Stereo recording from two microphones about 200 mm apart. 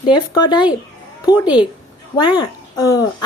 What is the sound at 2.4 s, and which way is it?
Speech, 15° left (ahead or behind).